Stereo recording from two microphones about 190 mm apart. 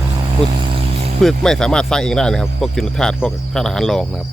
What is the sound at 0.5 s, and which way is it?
Vehicle, 25° right (ahead or behind).